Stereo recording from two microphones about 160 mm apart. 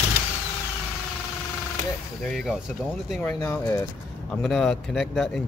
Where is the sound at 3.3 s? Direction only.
15° left (ahead or behind).